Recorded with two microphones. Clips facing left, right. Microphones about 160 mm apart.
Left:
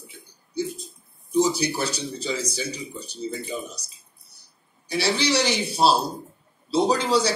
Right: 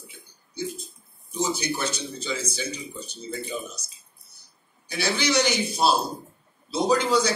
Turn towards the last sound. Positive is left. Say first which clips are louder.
# even
turn(degrees=30)  # may be behind; listen again after turning